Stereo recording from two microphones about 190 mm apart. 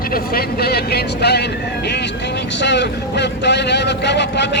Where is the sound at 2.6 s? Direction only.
70° left (ahead or behind).